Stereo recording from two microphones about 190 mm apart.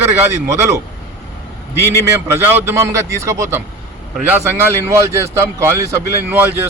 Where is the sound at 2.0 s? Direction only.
15° right (ahead or behind).